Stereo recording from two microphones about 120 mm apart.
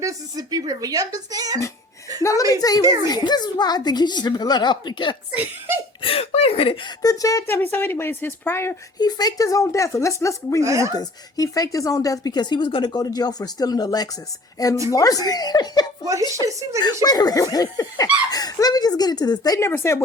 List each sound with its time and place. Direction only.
0.0 s a woman's voice: 30° right (ahead or behind)
2.2 s speech: 25° left (ahead or behind)
2.8 s a woman's voice: 25° right (ahead or behind)
3.1 s speech: 35° left (ahead or behind)
5.3 s speech: 15° right (ahead or behind)
6.0 s speech: 50° left (ahead or behind)
7.0 s speech: 30° left (ahead or behind)
9.0 s speech: 35° left (ahead or behind)
10.6 s a woman's voice: 25° right (ahead or behind)
10.9 s speech: 30° left (ahead or behind)
16.5 s a woman's voice: 25° right (ahead or behind)
16.8 s speech: 35° left (ahead or behind)